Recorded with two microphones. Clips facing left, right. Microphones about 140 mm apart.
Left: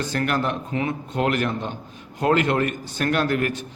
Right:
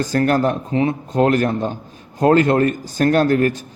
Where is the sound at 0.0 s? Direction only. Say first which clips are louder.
Right 7 dB; 40° right (ahead or behind).